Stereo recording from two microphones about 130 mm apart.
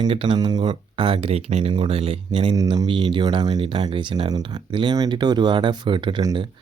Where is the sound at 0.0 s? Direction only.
40° right (ahead or behind).